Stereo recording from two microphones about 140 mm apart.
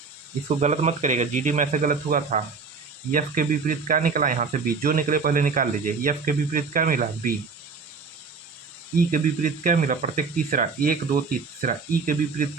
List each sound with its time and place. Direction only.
0.4 s speech: 50° right (ahead or behind); by 7.3 s 75° right (ahead or behind)
9.0 s speech: 80° right